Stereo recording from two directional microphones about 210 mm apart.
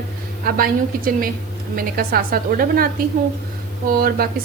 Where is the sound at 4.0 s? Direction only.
45° right (ahead or behind).